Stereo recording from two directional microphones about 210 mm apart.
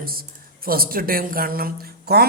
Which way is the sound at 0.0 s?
45° right (ahead or behind).